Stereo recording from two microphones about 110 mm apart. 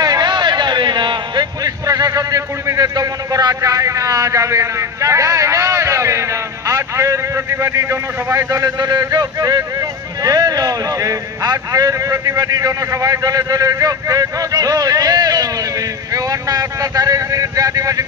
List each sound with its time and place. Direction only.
0.0 s a man's voice: 35° right (ahead or behind)